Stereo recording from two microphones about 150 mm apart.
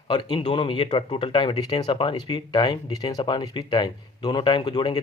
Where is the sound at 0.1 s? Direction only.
30° left (ahead or behind).